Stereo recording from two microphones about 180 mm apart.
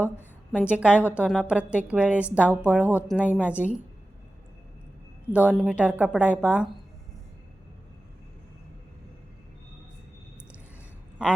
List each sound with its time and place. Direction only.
0.0 s a sound: 10° right (ahead or behind)
0.7 s a woman's voice: 5° right (ahead or behind)
5.3 s a woman's voice: 5° right (ahead or behind)